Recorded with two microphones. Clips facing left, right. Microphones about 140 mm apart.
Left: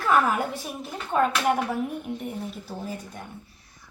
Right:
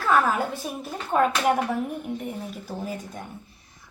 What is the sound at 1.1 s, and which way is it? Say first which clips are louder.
Speech: right 1 dB; 5° right (ahead or behind).